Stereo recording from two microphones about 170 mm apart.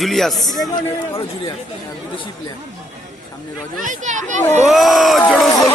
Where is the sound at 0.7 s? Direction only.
25° left (ahead or behind).